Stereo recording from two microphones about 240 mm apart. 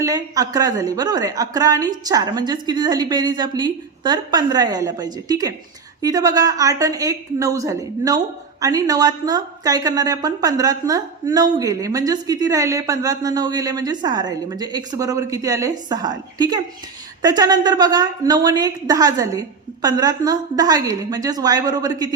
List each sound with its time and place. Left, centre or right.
0.0 s a woman's voice: centre